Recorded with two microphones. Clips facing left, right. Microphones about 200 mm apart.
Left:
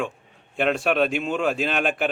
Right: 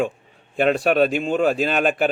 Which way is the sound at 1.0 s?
Centre (ahead or behind).